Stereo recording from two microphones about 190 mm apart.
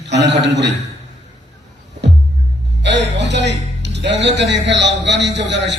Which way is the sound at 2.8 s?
65° right (ahead or behind).